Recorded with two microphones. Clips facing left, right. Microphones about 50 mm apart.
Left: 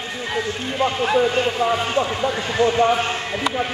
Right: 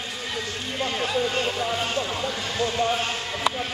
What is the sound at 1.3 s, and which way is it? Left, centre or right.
Speech, left.